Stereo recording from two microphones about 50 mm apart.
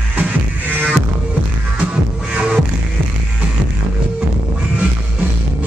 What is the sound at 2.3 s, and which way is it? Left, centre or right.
Music, right.